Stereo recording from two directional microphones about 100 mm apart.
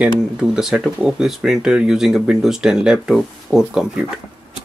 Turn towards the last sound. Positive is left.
turn(degrees=-5)  # may be behind; listen again after turning